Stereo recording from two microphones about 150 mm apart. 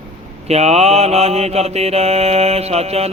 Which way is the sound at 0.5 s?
45° right (ahead or behind).